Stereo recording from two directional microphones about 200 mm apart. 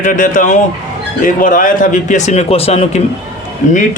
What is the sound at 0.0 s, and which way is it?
Speech, 40° left (ahead or behind).